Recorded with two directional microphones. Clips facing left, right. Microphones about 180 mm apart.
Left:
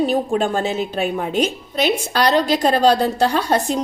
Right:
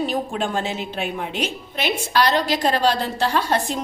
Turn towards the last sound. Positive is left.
turn(degrees=40)  # may be behind; listen again after turning